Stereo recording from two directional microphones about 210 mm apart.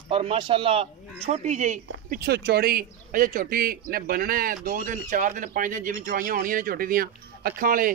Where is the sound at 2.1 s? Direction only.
50° right (ahead or behind).